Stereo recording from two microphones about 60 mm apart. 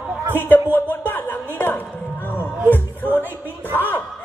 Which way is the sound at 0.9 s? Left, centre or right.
Left.